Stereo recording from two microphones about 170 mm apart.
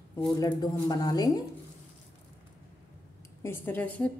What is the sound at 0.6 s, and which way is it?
Speech, 25° left (ahead or behind).